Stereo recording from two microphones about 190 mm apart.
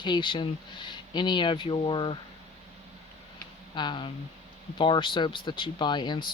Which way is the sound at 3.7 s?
25° left (ahead or behind).